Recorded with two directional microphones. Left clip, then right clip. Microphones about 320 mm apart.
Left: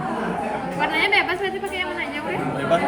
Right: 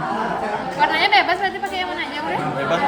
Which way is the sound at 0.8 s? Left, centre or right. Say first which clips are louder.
Right 4 dB; right.